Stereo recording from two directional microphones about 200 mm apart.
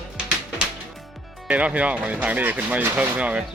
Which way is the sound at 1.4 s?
5° right (ahead or behind).